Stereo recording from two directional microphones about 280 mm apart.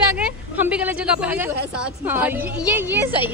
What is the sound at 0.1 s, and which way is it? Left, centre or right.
A woman's voice, centre.